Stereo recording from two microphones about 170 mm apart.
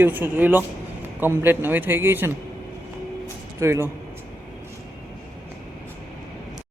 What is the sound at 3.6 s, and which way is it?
Speech, 15° right (ahead or behind).